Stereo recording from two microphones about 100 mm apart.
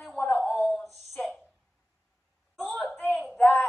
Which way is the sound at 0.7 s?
5° left (ahead or behind).